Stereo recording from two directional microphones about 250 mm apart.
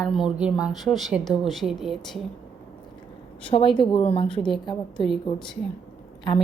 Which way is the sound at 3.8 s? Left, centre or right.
Left.